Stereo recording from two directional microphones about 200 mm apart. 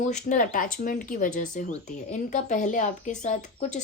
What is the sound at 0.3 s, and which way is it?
Speech, 40° left (ahead or behind).